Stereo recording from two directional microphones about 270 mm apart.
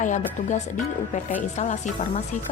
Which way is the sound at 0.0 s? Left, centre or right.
Left.